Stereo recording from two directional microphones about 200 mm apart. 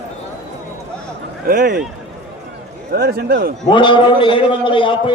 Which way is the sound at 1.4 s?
45° right (ahead or behind).